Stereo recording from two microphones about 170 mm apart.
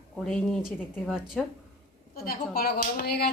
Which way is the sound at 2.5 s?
65° left (ahead or behind).